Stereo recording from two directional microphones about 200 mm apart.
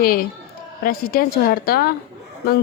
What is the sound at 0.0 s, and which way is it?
A woman's voice, 45° left (ahead or behind).